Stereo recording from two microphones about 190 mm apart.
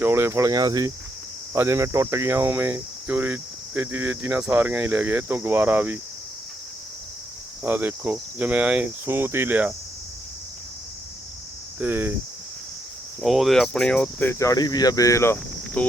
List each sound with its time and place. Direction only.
0.0 s cricket: 15° right (ahead or behind)
7.6 s cricket: 10° right (ahead or behind)
11.8 s cricket: 10° right (ahead or behind)
13.2 s speech: centre (ahead or behind)